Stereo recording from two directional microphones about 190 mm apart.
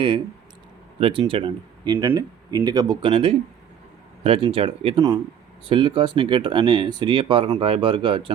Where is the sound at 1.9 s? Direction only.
15° right (ahead or behind).